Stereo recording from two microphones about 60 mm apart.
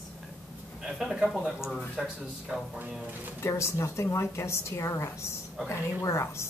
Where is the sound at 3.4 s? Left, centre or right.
Left.